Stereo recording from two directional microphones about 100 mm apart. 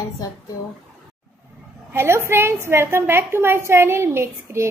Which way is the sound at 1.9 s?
25° right (ahead or behind).